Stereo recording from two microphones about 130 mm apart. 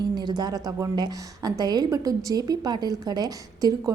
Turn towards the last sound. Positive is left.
turn(degrees=-30)  # may be behind; listen again after turning